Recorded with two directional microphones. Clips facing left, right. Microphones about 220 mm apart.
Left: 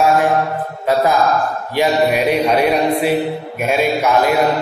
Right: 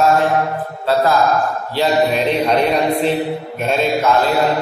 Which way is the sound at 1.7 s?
15° left (ahead or behind).